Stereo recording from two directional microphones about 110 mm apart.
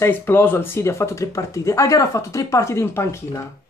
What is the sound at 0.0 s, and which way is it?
A man's voice, 20° left (ahead or behind).